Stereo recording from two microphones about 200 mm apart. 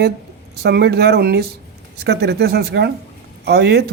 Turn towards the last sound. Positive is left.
turn(degrees=-55)  # may be behind; listen again after turning